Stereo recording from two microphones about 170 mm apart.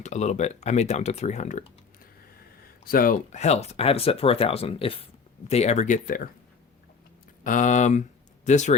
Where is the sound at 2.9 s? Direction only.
55° left (ahead or behind).